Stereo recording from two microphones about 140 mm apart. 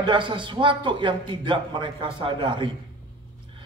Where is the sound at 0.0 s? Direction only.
35° right (ahead or behind).